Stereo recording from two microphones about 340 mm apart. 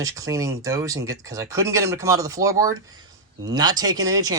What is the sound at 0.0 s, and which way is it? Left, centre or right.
Speech, centre.